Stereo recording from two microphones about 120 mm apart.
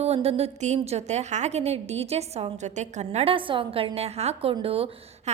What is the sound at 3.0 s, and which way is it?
Speech, 55° right (ahead or behind).